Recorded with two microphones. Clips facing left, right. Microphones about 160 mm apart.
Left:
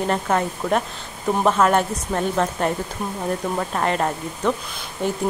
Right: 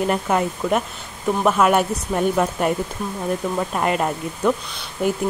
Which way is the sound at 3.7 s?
10° right (ahead or behind).